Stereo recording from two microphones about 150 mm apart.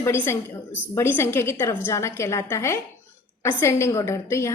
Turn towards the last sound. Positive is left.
turn(degrees=20)  # may be behind; listen again after turning